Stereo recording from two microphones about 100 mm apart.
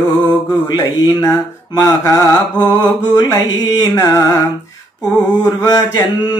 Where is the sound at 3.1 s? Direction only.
40° left (ahead or behind).